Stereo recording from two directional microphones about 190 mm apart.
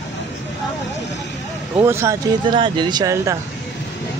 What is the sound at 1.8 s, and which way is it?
Speech, 15° right (ahead or behind).